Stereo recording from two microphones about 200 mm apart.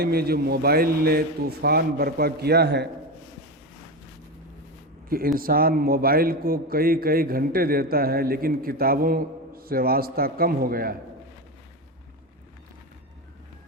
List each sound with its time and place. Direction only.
0.0 s a man's voice: 50° right (ahead or behind)
5.0 s a man's voice: 45° right (ahead or behind)